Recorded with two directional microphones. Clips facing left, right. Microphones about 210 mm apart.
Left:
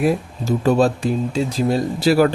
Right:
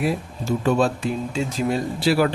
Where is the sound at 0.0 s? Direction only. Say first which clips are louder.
Left 5 dB; 40° left (ahead or behind).